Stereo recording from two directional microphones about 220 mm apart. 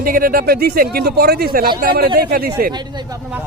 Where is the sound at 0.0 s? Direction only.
40° right (ahead or behind).